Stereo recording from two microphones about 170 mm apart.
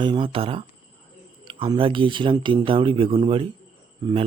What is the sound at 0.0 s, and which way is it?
Speech, 30° right (ahead or behind).